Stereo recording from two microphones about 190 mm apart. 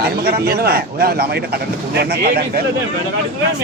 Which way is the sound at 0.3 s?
55° right (ahead or behind).